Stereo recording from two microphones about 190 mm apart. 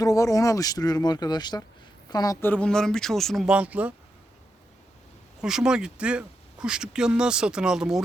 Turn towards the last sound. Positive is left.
turn(degrees=-5)  # may be behind; listen again after turning